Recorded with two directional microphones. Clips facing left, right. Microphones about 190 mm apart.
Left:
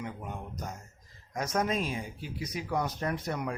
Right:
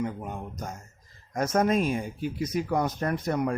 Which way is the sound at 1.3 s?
50° right (ahead or behind).